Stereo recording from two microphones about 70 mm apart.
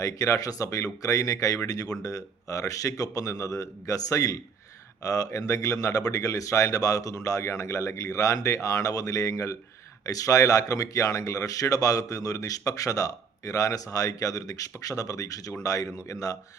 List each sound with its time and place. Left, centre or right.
0.0 s speech: left